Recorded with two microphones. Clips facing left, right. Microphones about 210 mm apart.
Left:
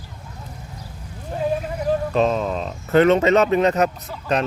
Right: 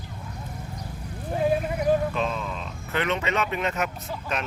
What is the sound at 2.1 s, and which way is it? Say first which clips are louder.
Speech: left 9 dB; 40° left (ahead or behind).